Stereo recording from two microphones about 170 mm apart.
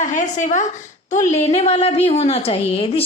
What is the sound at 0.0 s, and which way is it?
A woman's voice, 45° left (ahead or behind).